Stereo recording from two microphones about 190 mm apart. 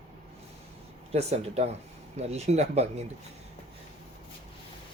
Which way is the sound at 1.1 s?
35° right (ahead or behind).